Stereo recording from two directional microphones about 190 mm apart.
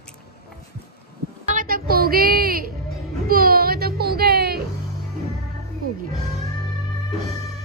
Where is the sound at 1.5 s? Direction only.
45° right (ahead or behind).